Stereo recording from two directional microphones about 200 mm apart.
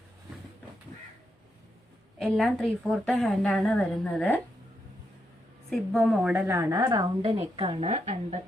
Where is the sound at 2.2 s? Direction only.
Centre (ahead or behind).